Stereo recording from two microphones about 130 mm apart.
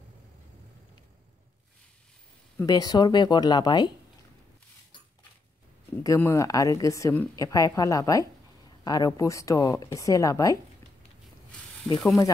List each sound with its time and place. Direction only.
2.6 s speech: 30° left (ahead or behind)
6.0 s speech: 20° left (ahead or behind)
11.9 s speech: 5° left (ahead or behind)